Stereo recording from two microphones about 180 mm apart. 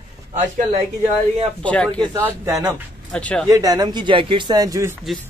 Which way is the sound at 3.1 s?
5° left (ahead or behind).